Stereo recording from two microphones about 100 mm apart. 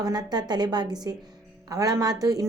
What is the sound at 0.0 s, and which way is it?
A woman's voice, 40° right (ahead or behind).